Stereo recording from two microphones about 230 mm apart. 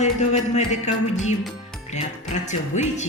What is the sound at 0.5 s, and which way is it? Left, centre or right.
Music, left.